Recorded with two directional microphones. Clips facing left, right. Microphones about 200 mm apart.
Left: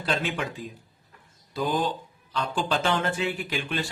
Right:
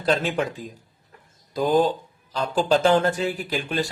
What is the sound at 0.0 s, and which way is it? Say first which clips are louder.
Speech: right 6 dB; 40° right (ahead or behind).